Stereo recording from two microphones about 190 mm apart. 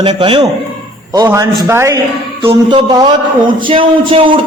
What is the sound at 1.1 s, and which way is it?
A man's voice, 15° right (ahead or behind).